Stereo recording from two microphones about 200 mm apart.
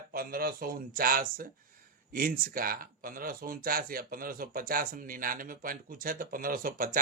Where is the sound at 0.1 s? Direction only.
50° right (ahead or behind).